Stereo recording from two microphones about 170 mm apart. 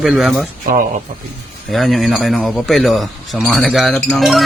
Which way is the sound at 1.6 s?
Centre (ahead or behind).